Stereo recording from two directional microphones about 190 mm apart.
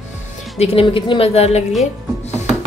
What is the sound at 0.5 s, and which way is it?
A woman's voice, 30° left (ahead or behind).